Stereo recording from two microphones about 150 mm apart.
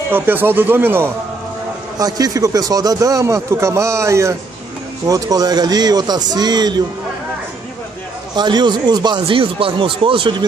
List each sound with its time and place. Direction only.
0.1 s speech: 15° right (ahead or behind)
2.0 s a man's voice: 25° right (ahead or behind)
8.4 s speech: 30° right (ahead or behind)